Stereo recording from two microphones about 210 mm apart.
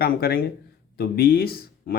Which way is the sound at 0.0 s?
45° left (ahead or behind).